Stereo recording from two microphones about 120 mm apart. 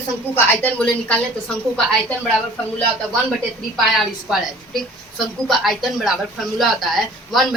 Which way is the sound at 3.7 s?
Centre (ahead or behind).